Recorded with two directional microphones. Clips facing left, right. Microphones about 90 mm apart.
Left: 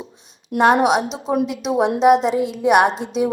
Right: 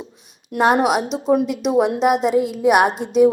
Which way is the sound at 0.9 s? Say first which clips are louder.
Left 1 dB; 40° left (ahead or behind).